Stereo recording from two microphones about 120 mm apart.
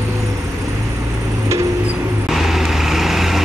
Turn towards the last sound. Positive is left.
turn(degrees=0)  # may be behind; listen again after turning